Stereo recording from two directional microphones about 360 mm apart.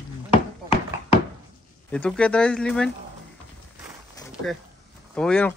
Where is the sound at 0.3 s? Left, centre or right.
Centre.